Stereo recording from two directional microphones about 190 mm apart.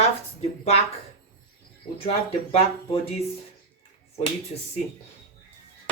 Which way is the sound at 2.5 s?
30° left (ahead or behind).